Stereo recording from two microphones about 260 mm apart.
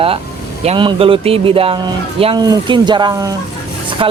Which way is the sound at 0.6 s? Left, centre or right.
Right.